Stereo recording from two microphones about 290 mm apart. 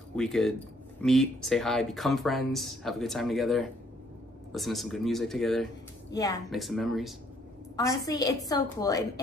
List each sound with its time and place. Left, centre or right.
0.1 s speech: centre
6.1 s a woman's voice: centre
6.5 s speech: centre
7.7 s a woman's voice: centre